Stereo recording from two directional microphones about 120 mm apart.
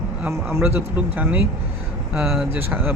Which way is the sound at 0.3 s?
20° right (ahead or behind).